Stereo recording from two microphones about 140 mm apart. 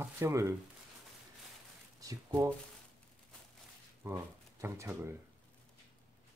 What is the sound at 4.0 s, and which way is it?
Speech, 20° right (ahead or behind).